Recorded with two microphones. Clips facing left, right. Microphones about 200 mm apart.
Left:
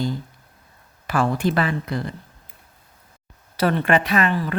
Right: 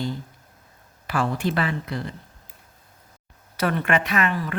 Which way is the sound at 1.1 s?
50° left (ahead or behind).